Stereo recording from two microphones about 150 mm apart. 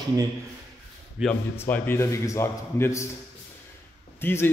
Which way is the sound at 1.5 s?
15° left (ahead or behind).